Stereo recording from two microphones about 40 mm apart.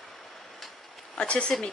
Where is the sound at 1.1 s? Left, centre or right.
Left.